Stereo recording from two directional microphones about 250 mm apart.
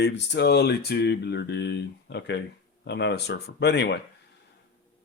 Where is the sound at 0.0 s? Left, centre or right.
Left.